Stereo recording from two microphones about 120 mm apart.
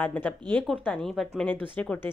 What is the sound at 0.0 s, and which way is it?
Speech, 15° left (ahead or behind).